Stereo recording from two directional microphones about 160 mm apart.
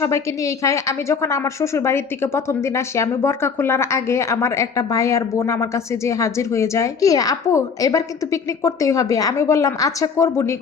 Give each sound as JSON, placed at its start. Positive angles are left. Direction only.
{"t": 0.0, "sound": "a woman's voice", "side_deg": 20}